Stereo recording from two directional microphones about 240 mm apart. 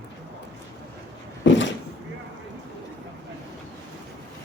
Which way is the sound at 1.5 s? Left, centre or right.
Left.